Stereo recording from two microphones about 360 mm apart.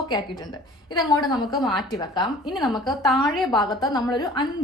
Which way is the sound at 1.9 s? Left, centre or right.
Centre.